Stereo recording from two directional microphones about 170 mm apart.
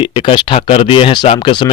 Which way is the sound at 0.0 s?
30° left (ahead or behind).